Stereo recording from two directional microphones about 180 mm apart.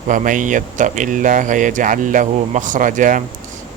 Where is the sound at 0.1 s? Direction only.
45° right (ahead or behind).